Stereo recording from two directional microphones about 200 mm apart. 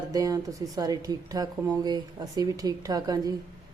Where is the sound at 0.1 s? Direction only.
20° right (ahead or behind).